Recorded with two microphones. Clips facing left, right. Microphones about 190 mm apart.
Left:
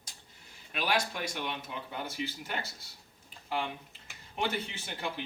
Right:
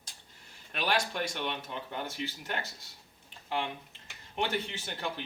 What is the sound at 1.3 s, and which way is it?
Speech, 10° left (ahead or behind).